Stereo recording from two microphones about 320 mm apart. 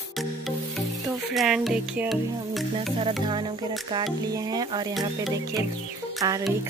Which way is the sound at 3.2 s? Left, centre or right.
Centre.